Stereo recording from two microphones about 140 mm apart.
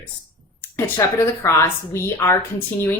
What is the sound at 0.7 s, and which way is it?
A woman's voice, 20° left (ahead or behind).